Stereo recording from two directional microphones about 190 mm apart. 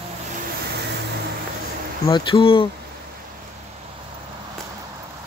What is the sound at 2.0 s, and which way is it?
Speech, 25° left (ahead or behind).